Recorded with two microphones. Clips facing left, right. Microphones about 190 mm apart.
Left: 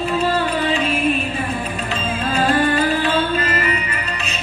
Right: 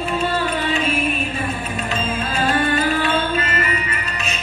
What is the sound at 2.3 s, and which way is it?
Music, 35° left (ahead or behind).